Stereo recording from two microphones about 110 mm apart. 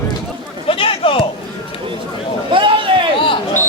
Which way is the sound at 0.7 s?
55° left (ahead or behind).